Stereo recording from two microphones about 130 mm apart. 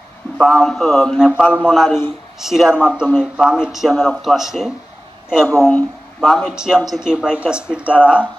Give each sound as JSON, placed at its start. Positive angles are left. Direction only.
{"t": 0.4, "sound": "speech", "side_deg": 5}
{"t": 5.5, "sound": "speech", "side_deg": 10}